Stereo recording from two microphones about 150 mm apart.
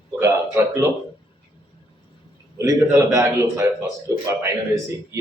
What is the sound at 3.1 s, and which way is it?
Speech, 20° right (ahead or behind).